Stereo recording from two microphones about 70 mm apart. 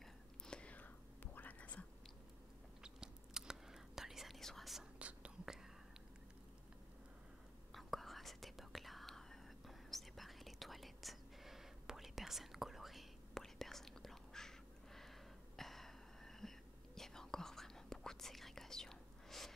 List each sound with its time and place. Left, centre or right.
0.5 s whispering: centre
2.8 s whispering: centre
4.9 s whispering: centre
7.7 s whispering: centre
15.0 s a sound: centre